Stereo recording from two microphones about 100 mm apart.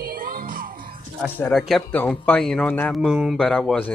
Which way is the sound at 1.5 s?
Centre (ahead or behind).